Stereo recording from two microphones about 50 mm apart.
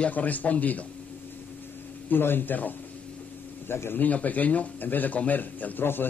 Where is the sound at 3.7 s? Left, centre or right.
Left.